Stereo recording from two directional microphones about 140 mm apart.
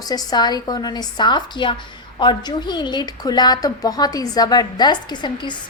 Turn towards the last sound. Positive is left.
turn(degrees=30)  # may be behind; listen again after turning